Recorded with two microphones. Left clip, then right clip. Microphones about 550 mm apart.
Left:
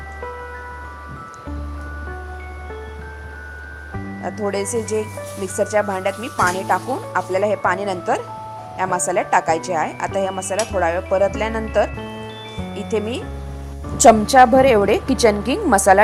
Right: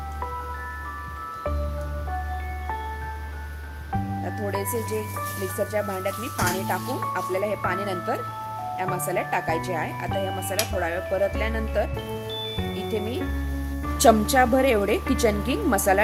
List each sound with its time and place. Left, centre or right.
4.5 s speech: right
12.9 s speech: right